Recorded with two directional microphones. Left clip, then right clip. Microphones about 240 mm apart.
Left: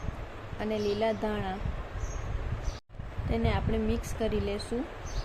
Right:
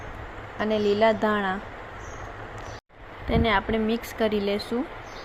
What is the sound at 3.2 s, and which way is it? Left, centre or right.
Speech, centre.